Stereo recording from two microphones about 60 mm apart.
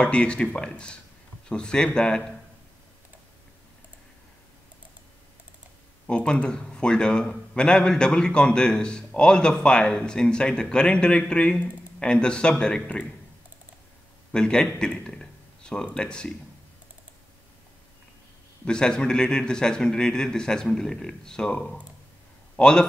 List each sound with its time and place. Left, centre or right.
0.0 s a man's voice: centre
6.0 s a man's voice: centre
14.3 s a man's voice: centre
18.7 s a man's voice: centre